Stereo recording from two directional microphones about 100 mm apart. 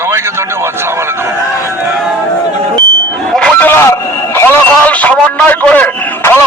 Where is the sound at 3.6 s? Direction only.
25° left (ahead or behind).